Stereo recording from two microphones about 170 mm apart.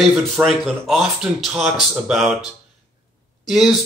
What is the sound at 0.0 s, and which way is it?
Speech, centre (ahead or behind).